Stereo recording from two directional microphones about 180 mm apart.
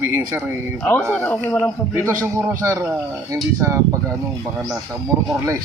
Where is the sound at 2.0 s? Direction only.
15° right (ahead or behind).